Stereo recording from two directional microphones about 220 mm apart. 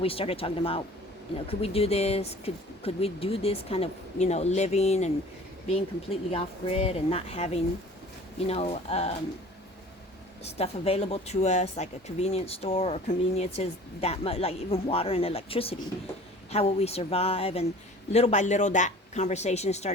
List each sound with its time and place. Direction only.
0.0 s speech: 25° left (ahead or behind)
10.4 s speech: 30° left (ahead or behind)